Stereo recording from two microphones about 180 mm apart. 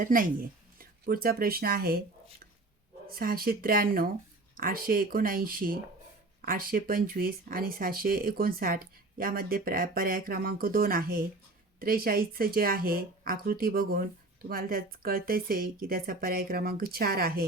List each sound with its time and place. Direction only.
0.0 s speech: 50° right (ahead or behind)
3.1 s speech: 55° right (ahead or behind)